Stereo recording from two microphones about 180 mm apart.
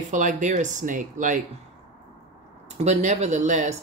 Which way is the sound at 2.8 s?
40° right (ahead or behind).